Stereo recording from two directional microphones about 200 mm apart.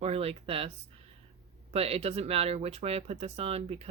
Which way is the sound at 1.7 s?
30° right (ahead or behind).